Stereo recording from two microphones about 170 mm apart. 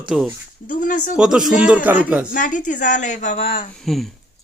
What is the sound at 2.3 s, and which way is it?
A woman's voice, 50° left (ahead or behind).